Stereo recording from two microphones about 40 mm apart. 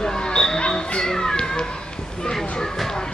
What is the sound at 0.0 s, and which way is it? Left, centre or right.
Basketball bounce, centre.